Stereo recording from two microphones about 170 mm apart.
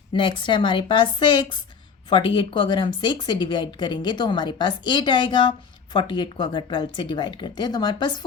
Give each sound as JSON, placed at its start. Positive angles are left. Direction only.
{"t": 0.1, "sound": "speech", "side_deg": 30}